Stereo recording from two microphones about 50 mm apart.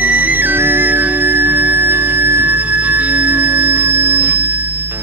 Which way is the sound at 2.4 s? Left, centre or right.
Right.